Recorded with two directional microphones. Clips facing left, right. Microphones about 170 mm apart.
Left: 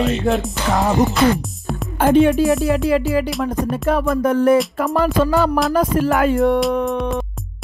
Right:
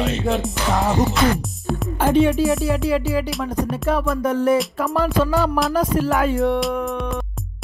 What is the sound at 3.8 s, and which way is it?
Speech, 55° left (ahead or behind).